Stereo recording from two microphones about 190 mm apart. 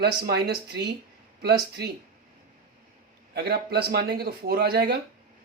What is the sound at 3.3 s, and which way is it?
Speech, 55° right (ahead or behind).